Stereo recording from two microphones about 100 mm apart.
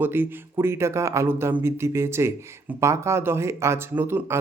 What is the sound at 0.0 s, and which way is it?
Speech, 20° right (ahead or behind).